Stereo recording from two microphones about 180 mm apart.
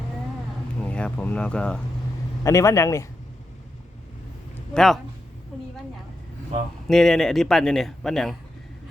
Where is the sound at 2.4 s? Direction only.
15° left (ahead or behind).